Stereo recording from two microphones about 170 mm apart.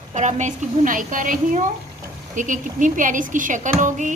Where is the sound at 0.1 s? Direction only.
45° right (ahead or behind).